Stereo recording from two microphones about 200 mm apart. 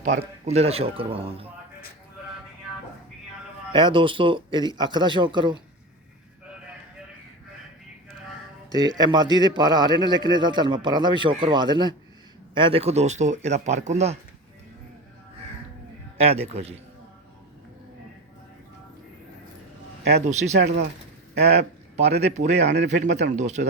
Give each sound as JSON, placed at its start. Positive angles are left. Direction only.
{"t": 0.0, "sound": "a man's voice", "side_deg": -35}
{"t": 3.7, "sound": "a man's voice", "side_deg": -25}
{"t": 8.7, "sound": "a man's voice", "side_deg": -20}
{"t": 16.1, "sound": "speech", "side_deg": -30}
{"t": 20.2, "sound": "speech", "side_deg": -35}
{"t": 21.9, "sound": "speech", "side_deg": -35}
{"t": 22.6, "sound": "speech", "side_deg": -55}
{"t": 23.3, "sound": "speech", "side_deg": -35}